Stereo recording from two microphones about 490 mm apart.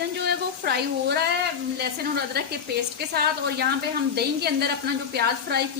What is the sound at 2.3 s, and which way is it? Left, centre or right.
A woman's voice, centre.